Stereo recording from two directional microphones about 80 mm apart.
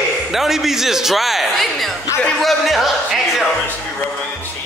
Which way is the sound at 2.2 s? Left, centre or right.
Centre.